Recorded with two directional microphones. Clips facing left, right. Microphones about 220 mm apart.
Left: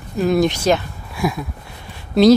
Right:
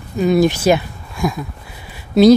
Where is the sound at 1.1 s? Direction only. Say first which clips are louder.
Right 1 dB; 5° left (ahead or behind).